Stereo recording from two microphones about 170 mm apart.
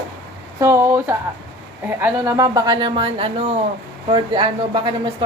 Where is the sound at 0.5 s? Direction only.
15° right (ahead or behind).